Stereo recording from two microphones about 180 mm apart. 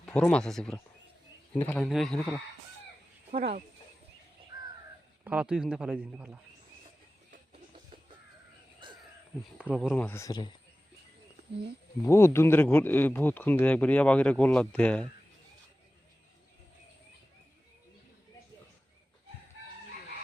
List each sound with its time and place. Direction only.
0.0 s speech: 5° left (ahead or behind)
3.3 s speech: 55° right (ahead or behind)
5.2 s a man's voice: 5° right (ahead or behind)
9.6 s a man's voice: 5° right (ahead or behind)
9.9 s speech: 10° left (ahead or behind)
12.0 s speech: 15° left (ahead or behind)